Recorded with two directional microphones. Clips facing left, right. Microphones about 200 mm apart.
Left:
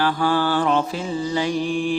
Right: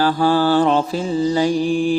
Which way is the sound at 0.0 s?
35° right (ahead or behind).